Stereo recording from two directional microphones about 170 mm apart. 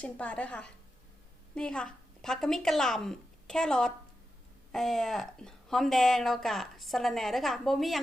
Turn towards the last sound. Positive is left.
turn(degrees=0)  # may be behind; listen again after turning